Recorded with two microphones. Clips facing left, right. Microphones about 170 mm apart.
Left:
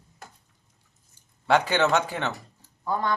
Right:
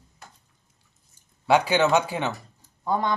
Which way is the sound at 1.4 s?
10° right (ahead or behind).